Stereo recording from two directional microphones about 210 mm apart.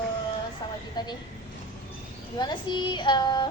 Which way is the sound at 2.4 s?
20° left (ahead or behind).